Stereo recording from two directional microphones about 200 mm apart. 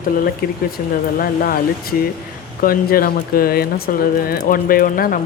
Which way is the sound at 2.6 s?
45° left (ahead or behind).